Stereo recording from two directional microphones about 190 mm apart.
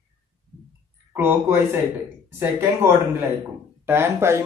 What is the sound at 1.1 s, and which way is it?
Speech, 10° right (ahead or behind).